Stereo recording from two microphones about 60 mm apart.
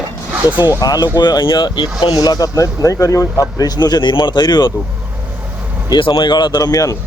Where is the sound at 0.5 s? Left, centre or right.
Right.